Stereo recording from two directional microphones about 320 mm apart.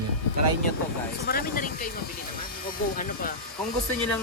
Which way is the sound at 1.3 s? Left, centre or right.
Left.